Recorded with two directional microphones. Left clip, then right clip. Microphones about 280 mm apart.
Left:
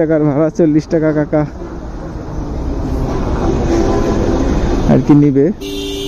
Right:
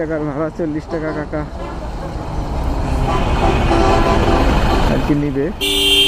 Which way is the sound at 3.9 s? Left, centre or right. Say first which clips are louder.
Right 1 dB; right.